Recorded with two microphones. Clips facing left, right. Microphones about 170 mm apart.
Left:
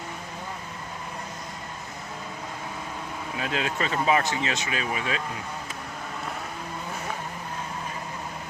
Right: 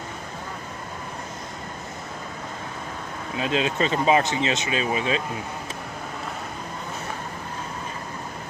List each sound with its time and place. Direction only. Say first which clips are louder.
3.3 s speech: right 5 dB; 20° right (ahead or behind)